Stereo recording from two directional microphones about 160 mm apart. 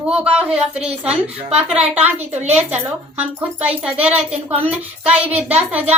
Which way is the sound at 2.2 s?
45° right (ahead or behind).